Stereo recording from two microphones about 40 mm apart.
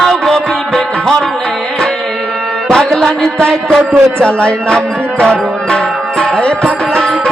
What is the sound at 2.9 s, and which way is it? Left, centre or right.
Music, centre.